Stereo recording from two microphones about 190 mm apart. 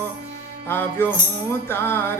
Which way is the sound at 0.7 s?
10° left (ahead or behind).